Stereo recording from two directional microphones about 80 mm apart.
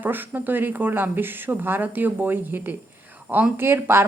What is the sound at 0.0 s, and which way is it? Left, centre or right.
A woman's voice, right.